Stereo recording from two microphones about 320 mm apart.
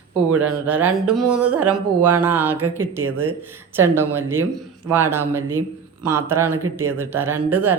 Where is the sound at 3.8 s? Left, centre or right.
Centre.